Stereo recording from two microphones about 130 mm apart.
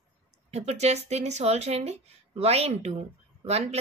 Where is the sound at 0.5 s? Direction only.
55° right (ahead or behind).